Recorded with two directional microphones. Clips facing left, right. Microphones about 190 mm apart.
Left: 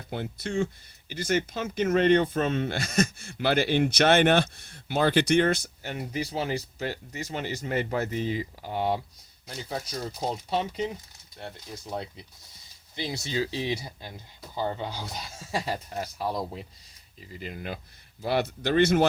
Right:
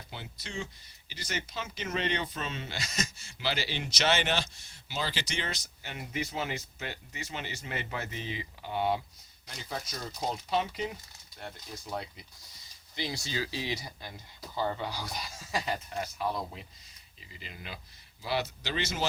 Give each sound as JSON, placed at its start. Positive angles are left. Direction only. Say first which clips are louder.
{"t": 0.1, "sound": "speech", "louder": "left 12 dB", "side_deg": 50}
{"t": 9.6, "sound": "speech", "louder": "left 5 dB", "side_deg": 30}
{"t": 17.2, "sound": "speech", "louder": "left 10 dB", "side_deg": 45}